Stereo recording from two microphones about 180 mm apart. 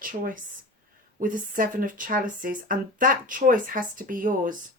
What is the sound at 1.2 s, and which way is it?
A woman's voice, 50° right (ahead or behind).